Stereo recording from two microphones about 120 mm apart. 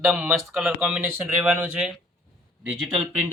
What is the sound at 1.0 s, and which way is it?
Speech, 15° right (ahead or behind).